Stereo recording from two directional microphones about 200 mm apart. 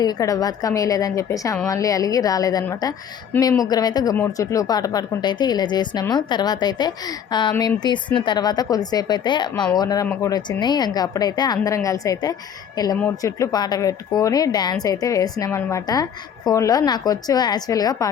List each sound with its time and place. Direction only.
0.0 s a woman's voice: 20° left (ahead or behind)